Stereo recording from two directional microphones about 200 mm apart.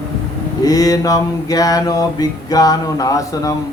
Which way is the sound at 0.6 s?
20° left (ahead or behind).